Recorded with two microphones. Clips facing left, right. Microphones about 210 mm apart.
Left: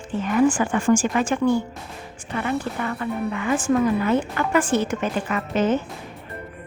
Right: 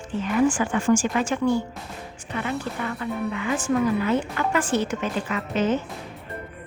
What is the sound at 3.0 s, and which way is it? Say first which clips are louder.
A woman's voice: left 1 dB; 45° left (ahead or behind).